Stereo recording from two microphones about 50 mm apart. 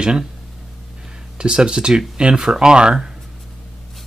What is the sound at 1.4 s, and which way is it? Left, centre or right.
Speech, centre.